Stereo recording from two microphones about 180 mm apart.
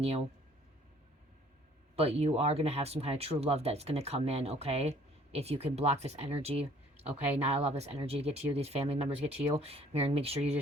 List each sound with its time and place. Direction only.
2.0 s speech: 35° right (ahead or behind)